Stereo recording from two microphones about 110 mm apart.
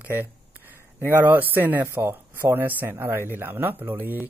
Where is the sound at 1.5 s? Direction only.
15° right (ahead or behind).